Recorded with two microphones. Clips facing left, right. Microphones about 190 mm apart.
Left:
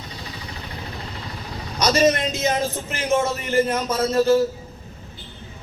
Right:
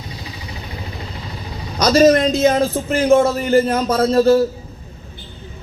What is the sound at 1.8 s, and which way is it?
A man's voice, 35° right (ahead or behind).